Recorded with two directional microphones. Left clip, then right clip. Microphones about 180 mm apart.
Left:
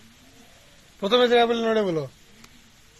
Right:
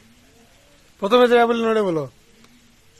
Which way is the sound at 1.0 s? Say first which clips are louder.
Right 4 dB; 45° right (ahead or behind).